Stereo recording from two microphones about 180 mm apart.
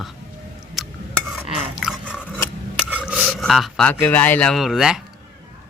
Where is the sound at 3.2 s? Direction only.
5° left (ahead or behind).